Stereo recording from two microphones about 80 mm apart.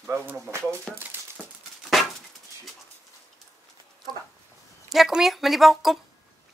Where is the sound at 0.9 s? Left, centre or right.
Centre.